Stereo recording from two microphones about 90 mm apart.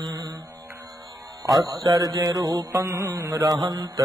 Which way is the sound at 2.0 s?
40° right (ahead or behind).